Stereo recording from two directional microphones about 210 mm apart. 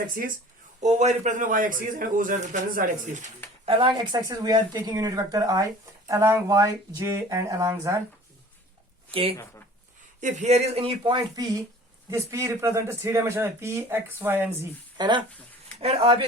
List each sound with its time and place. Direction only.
0.8 s a man's voice: 35° right (ahead or behind)
3.7 s speech: 25° right (ahead or behind)
10.2 s a man's voice: 35° right (ahead or behind); by 14.7 s 10° right (ahead or behind)
14.9 s speech: 20° right (ahead or behind)